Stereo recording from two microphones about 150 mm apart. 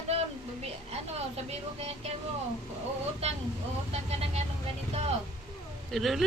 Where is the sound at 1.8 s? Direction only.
45° right (ahead or behind).